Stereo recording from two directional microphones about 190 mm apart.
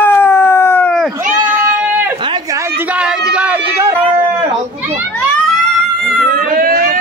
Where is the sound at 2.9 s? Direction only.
5° right (ahead or behind).